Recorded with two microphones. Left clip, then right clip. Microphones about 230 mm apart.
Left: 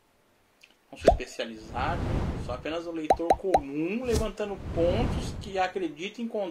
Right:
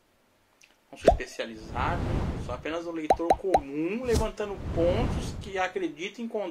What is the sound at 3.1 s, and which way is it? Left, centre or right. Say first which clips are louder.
Speech: even; centre.